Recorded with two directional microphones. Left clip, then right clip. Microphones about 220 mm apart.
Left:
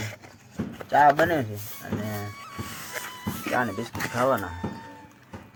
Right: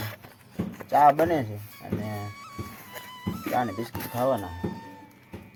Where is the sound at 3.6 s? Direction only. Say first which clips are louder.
Left 1 dB; centre (ahead or behind).